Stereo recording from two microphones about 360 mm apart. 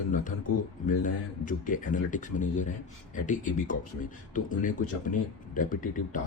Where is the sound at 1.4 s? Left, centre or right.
Left.